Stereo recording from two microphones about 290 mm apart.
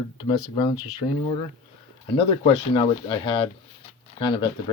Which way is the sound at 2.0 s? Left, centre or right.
Centre.